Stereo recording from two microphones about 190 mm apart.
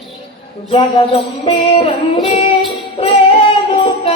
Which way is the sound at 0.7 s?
30° left (ahead or behind).